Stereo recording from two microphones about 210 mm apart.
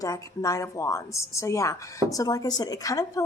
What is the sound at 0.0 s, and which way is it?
A woman's voice, 15° left (ahead or behind).